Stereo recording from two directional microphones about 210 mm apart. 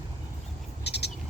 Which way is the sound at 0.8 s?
55° left (ahead or behind).